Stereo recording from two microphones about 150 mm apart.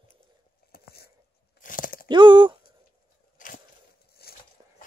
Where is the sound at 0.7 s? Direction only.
90° left.